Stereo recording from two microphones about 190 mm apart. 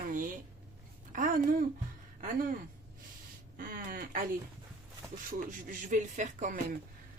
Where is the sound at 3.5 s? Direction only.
45° right (ahead or behind).